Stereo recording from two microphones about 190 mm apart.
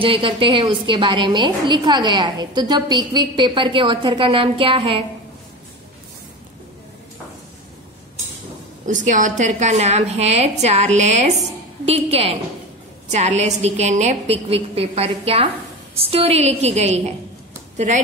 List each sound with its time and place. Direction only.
0.0 s a woman's voice: 25° right (ahead or behind)
8.8 s a woman's voice: 40° right (ahead or behind)